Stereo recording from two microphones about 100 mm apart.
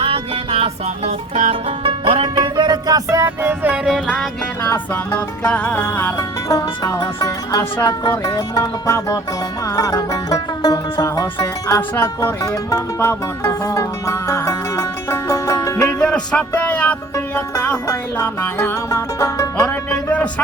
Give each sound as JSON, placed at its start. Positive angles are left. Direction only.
{"t": 0.0, "sound": "music", "side_deg": -65}
{"t": 2.4, "sound": "music", "side_deg": -45}
{"t": 4.0, "sound": "music", "side_deg": 0}
{"t": 5.4, "sound": "music", "side_deg": 15}
{"t": 6.1, "sound": "music", "side_deg": 35}
{"t": 7.5, "sound": "music", "side_deg": 25}
{"t": 7.9, "sound": "music", "side_deg": 40}
{"t": 15.8, "sound": "music", "side_deg": 10}
{"t": 19.6, "sound": "speech", "side_deg": 10}